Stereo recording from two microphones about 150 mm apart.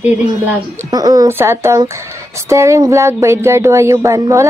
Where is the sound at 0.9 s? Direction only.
25° right (ahead or behind).